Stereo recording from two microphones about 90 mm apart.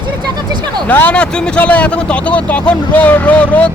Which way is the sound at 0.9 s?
15° left (ahead or behind).